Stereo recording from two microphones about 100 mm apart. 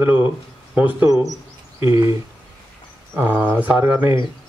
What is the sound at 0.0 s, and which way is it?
Speech, 15° right (ahead or behind).